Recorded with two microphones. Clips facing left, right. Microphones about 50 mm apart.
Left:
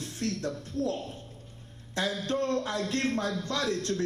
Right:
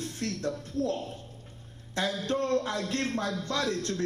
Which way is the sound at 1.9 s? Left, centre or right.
Right.